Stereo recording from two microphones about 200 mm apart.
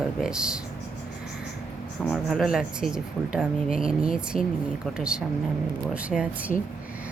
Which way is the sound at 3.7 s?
45° left (ahead or behind).